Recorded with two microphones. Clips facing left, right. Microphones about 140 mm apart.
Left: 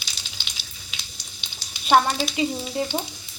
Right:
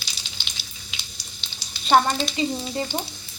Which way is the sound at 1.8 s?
5° left (ahead or behind).